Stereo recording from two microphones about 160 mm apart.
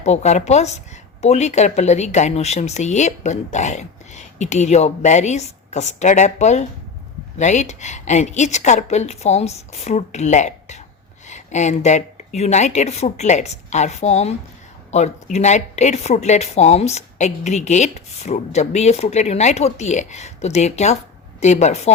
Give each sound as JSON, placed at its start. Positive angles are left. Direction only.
{"t": 0.0, "sound": "speech", "side_deg": 45}